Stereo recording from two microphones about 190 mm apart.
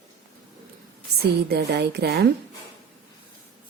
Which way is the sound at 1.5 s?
60° right (ahead or behind).